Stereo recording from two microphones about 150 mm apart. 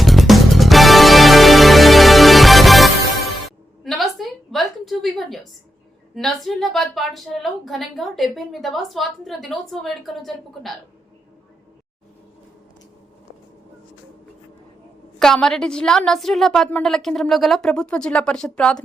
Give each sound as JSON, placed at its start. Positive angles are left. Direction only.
{"t": 0.0, "sound": "music", "side_deg": 0}
{"t": 3.4, "sound": "a sound", "side_deg": 0}
{"t": 6.1, "sound": "speech", "side_deg": 0}
{"t": 15.2, "sound": "speech", "side_deg": 5}